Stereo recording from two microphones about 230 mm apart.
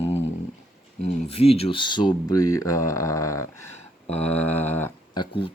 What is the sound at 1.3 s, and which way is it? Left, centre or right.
Speech, left.